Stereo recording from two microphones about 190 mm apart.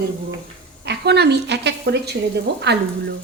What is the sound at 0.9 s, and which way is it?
A woman's voice, 60° right (ahead or behind).